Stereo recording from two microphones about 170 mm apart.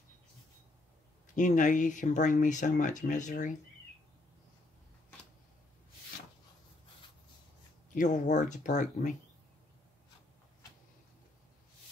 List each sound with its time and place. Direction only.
1.3 s speech: 45° left (ahead or behind)
7.9 s speech: 45° left (ahead or behind)